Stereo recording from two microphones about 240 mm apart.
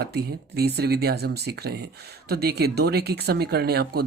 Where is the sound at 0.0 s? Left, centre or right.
Right.